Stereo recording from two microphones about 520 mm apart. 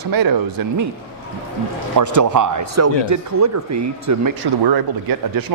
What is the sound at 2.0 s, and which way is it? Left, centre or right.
Speech, right.